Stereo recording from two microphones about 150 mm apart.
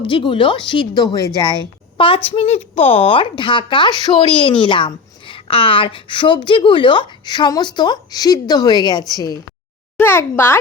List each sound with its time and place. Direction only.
0.0 s a woman's voice: 35° left (ahead or behind)
10.0 s a child's voice: 15° left (ahead or behind)